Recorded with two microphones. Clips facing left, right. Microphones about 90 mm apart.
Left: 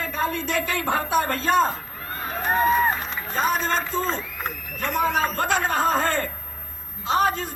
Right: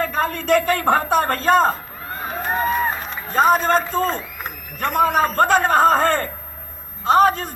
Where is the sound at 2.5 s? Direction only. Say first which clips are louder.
Left 2 dB; 10° left (ahead or behind).